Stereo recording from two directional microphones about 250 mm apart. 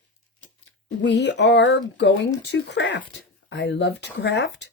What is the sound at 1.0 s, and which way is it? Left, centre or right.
Speech, left.